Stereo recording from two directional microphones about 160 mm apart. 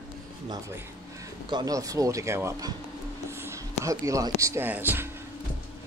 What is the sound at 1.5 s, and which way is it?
Speech, 20° right (ahead or behind).